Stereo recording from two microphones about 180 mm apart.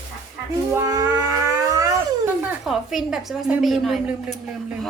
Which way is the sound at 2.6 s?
Centre (ahead or behind).